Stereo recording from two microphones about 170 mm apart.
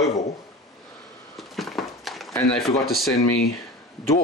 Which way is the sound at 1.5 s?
Centre (ahead or behind).